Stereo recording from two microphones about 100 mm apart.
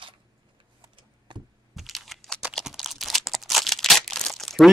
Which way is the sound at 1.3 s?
50° right (ahead or behind).